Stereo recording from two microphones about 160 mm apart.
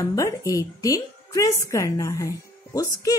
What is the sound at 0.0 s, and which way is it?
Speech, 20° left (ahead or behind).